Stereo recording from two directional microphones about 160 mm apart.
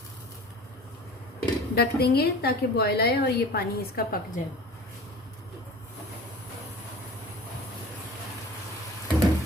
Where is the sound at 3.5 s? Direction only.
70° left (ahead or behind).